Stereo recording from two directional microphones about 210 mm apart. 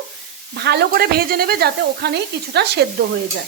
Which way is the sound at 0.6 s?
50° right (ahead or behind).